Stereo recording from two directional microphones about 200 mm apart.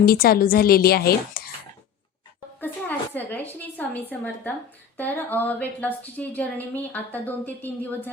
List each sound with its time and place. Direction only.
0.0 s a woman's voice: 50° left (ahead or behind)
2.6 s a woman's voice: 10° left (ahead or behind)